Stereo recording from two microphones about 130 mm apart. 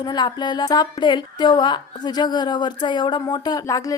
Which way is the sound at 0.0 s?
35° left (ahead or behind).